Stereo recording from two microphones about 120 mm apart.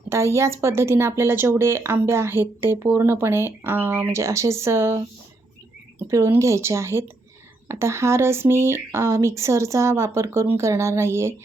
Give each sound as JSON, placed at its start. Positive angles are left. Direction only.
{"t": 0.1, "sound": "speech", "side_deg": -25}
{"t": 6.0, "sound": "speech", "side_deg": -25}